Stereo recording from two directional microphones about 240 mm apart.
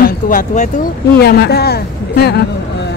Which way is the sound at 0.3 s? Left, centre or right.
Left.